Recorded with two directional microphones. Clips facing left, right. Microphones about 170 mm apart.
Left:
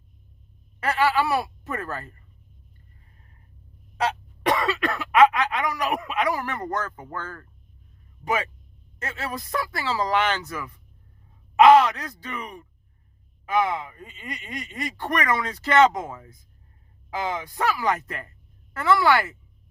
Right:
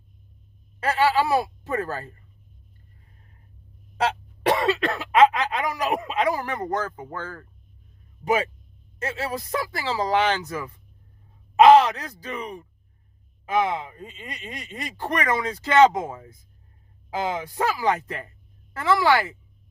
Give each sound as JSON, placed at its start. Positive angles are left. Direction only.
{"t": 0.9, "sound": "speech", "side_deg": -30}
{"t": 4.4, "sound": "speech", "side_deg": -30}
{"t": 9.0, "sound": "speech", "side_deg": -30}